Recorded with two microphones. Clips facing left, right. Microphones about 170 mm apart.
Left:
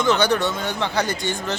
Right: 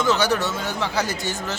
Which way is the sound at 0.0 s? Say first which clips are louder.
Left 2 dB; 5° right (ahead or behind).